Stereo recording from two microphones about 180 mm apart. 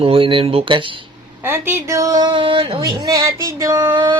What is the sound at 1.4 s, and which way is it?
Speech, 10° right (ahead or behind).